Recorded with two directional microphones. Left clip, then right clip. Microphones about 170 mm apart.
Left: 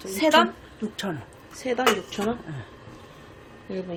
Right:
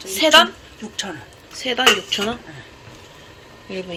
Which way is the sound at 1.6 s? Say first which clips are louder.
Right 7 dB; centre (ahead or behind).